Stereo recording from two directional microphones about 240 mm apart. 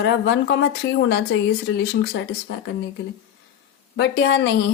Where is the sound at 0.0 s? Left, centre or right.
Left.